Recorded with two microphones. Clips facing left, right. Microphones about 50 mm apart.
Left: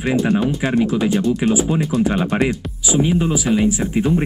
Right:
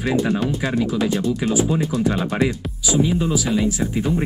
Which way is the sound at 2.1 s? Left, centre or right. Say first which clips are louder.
Left 2 dB; left.